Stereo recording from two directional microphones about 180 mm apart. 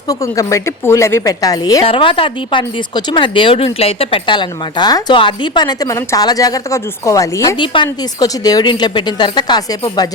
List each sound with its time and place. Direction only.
0.1 s a woman's voice: 15° left (ahead or behind)